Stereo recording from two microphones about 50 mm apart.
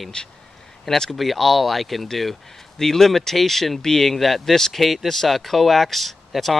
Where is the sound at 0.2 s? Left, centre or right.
Centre.